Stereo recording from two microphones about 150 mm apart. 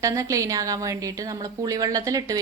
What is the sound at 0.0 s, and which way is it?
A woman's voice, 20° right (ahead or behind).